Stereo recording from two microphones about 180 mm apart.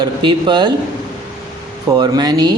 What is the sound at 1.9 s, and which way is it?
Speech, 25° right (ahead or behind).